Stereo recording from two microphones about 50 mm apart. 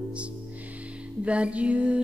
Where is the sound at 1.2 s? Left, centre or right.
Right.